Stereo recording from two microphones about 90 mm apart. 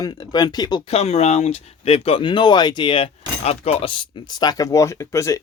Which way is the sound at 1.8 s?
90° left.